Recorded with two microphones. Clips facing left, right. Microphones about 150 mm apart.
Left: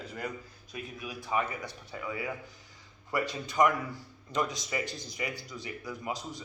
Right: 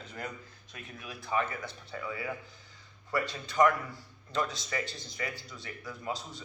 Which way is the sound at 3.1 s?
15° left (ahead or behind).